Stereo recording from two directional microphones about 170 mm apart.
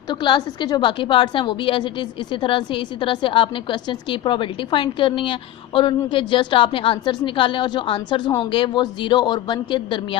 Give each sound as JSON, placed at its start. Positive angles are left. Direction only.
{"t": 0.1, "sound": "a woman's voice", "side_deg": 25}